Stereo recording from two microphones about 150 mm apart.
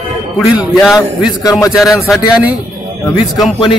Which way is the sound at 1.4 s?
20° left (ahead or behind).